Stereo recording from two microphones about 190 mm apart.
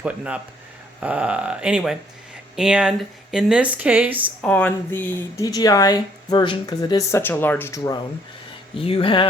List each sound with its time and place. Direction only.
0.9 s speech: 5° right (ahead or behind)
4.4 s speech: 10° left (ahead or behind)
8.8 s speech: 30° left (ahead or behind)